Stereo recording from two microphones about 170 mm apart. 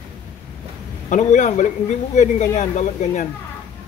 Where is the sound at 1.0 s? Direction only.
45° left (ahead or behind).